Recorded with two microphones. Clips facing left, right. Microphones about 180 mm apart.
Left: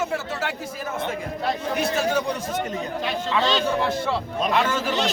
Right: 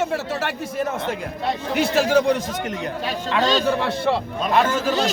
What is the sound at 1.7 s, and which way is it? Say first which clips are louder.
Speech: right 7 dB; 85° right.